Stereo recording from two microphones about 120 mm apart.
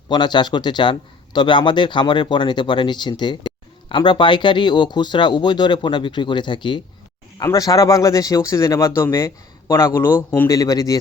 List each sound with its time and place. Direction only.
0.1 s speech: 40° left (ahead or behind)
7.3 s speech: 30° left (ahead or behind)
10.5 s speech: 30° left (ahead or behind)